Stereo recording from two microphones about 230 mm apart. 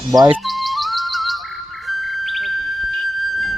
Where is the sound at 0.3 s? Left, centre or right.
Centre.